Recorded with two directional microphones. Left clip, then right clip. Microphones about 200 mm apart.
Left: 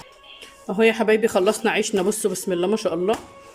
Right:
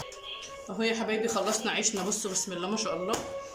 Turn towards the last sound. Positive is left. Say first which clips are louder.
# left 10 dB
turn(degrees=40)  # may be behind; listen again after turning